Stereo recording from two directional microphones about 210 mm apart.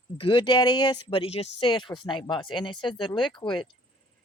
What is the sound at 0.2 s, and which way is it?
Speech, 25° left (ahead or behind).